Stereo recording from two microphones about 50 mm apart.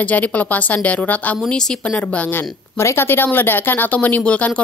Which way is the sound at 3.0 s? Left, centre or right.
Left.